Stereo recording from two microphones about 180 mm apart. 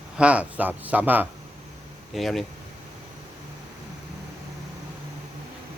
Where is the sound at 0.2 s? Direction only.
5° right (ahead or behind).